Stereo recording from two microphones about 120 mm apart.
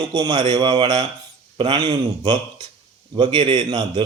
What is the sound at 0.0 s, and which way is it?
Speech, 40° right (ahead or behind).